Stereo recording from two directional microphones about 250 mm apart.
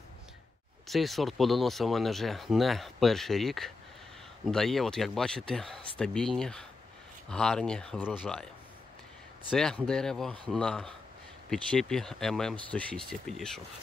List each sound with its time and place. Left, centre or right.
0.8 s speech: centre
9.5 s speech: centre